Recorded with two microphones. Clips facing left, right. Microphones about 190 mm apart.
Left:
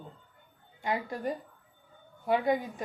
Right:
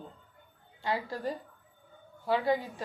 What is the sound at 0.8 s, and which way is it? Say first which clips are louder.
A woman's voice: left 1 dB; 15° left (ahead or behind).